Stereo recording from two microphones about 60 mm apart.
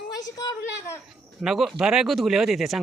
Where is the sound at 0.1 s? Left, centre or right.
Left.